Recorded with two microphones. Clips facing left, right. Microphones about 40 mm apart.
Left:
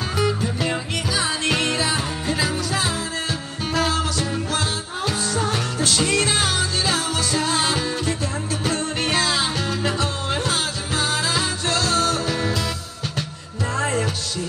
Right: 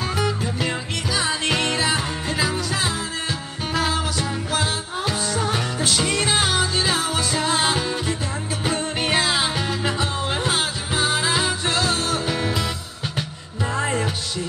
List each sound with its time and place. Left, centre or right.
0.2 s music: centre
13.7 s music: centre